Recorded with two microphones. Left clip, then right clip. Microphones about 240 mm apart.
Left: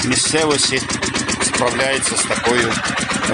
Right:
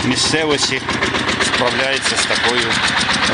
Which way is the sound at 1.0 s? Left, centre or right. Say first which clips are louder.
Right 3 dB; left.